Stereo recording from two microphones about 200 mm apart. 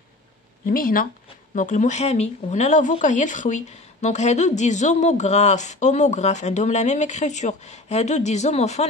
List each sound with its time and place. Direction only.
0.7 s speech: 45° left (ahead or behind)